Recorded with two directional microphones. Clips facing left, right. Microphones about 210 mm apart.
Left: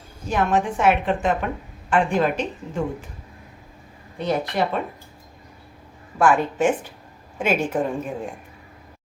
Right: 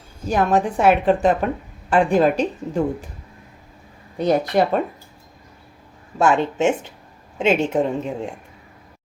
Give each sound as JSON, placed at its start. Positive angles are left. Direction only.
{"t": 0.3, "sound": "a woman's voice", "side_deg": -35}
{"t": 4.2, "sound": "speech", "side_deg": -45}
{"t": 6.1, "sound": "a woman's voice", "side_deg": -25}